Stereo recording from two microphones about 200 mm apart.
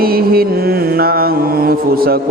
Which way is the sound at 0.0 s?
50° right (ahead or behind).